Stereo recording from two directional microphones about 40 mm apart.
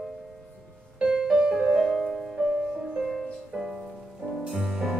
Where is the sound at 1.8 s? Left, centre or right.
Centre.